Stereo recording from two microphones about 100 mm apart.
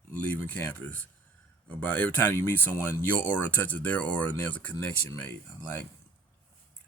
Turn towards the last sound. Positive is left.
turn(degrees=20)  # may be behind; listen again after turning